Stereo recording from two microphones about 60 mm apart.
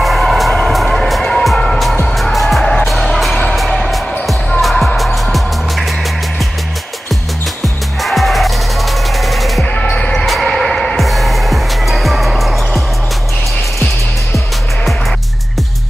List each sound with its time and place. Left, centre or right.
0.0 s music: centre
2.9 s music: centre
7.6 s music: centre
9.8 s music: left
10.2 s music: centre